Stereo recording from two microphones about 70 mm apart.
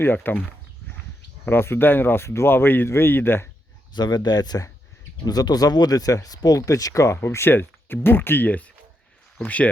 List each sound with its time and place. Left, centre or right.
0.0 s speech: left
1.5 s speech: left
3.9 s speech: left
5.2 s speech: left
7.2 s speech: left